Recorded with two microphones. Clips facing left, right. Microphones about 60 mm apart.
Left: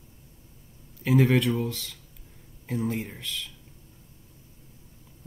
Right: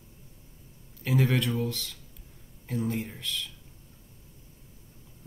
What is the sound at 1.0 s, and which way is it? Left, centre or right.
Speech, centre.